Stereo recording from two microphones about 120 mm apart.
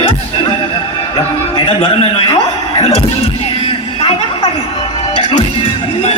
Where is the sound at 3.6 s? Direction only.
50° left (ahead or behind).